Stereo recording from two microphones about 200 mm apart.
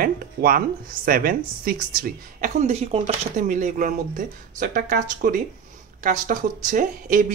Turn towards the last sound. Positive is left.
turn(degrees=-40)  # may be behind; listen again after turning